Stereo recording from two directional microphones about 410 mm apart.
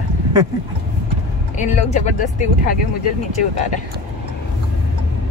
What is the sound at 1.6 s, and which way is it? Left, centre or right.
Speech, centre.